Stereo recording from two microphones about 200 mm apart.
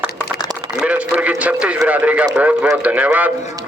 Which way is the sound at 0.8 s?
5° right (ahead or behind).